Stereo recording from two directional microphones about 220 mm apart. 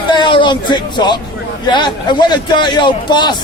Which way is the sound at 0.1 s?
20° left (ahead or behind).